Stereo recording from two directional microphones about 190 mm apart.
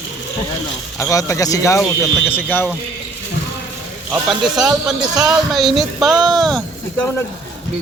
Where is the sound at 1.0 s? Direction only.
15° left (ahead or behind).